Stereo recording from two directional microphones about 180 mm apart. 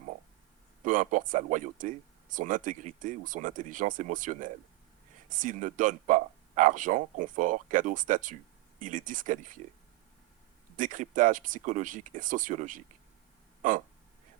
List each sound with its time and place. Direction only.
0.9 s speech: 45° right (ahead or behind)
10.8 s speech: 45° right (ahead or behind)
13.6 s a sound: 45° right (ahead or behind)